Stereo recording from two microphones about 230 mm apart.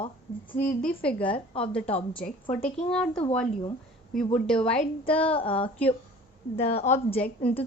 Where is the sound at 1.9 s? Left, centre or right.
Left.